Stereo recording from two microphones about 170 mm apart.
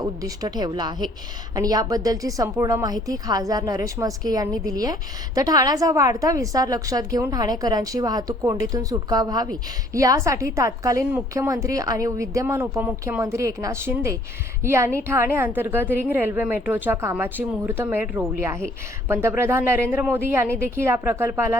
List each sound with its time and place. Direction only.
0.2 s a woman's voice: 25° right (ahead or behind)